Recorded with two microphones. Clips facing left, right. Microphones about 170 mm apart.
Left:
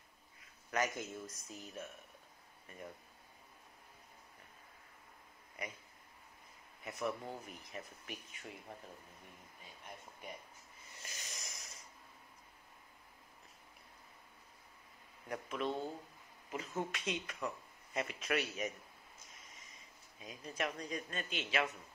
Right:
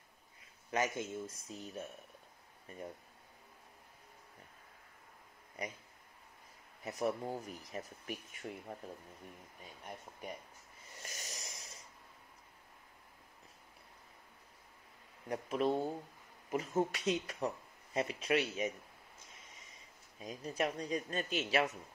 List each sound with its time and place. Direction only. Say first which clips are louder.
0.7 s speech: right 2 dB; 25° right (ahead or behind)
5.6 s speech: right 3 dB; 35° right (ahead or behind)
6.8 s speech: right 4 dB; 35° right (ahead or behind)
11.1 s a sound: right 3 dB; 40° right (ahead or behind)
15.2 s speech: right 5 dB; 35° right (ahead or behind)
20.2 s speech: right 4 dB; 40° right (ahead or behind)